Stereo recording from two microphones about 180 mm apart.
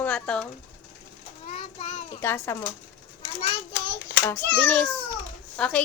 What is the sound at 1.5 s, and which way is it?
Speech, 40° left (ahead or behind).